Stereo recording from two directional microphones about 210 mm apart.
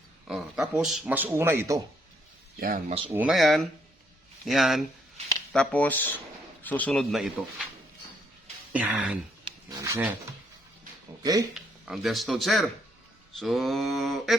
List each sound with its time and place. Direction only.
0.3 s speech: 5° right (ahead or behind)
2.6 s speech: 45° right (ahead or behind)
3.1 s speech: 5° right (ahead or behind)
8.7 s speech: 5° right (ahead or behind)
9.4 s a sound: 20° right (ahead or behind)
11.2 s speech: 15° right (ahead or behind)
11.5 s speech: centre (ahead or behind)